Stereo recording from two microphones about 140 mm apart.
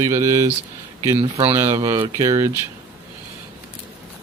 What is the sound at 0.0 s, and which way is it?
Speech, 20° right (ahead or behind).